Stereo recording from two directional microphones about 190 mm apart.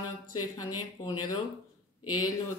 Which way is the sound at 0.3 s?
20° left (ahead or behind).